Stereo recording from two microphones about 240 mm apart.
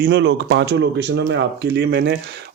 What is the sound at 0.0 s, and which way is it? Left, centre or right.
A man's voice, right.